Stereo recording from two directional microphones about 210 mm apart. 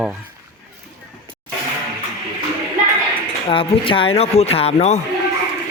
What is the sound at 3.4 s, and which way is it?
Speech, 25° left (ahead or behind).